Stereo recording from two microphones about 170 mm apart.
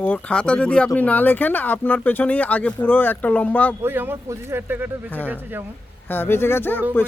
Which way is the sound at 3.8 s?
15° right (ahead or behind).